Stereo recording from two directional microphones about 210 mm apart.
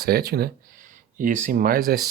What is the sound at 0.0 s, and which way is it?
Speech, 45° right (ahead or behind).